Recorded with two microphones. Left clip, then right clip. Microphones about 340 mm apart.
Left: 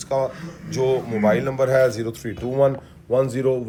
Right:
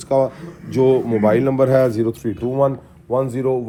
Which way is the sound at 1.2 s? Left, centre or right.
Centre.